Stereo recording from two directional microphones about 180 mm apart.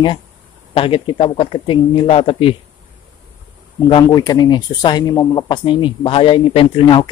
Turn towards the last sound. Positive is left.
turn(degrees=30)  # may be behind; listen again after turning